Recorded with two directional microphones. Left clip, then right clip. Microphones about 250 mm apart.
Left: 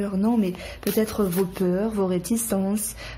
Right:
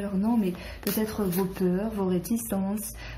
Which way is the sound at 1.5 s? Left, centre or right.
Left.